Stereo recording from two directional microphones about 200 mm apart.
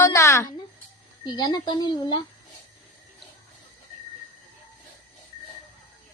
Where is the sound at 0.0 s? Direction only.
15° left (ahead or behind).